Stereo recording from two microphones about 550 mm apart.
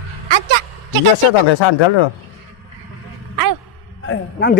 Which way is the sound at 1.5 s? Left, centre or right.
Left.